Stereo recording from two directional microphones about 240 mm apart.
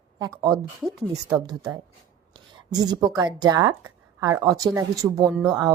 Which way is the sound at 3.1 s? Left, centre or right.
Centre.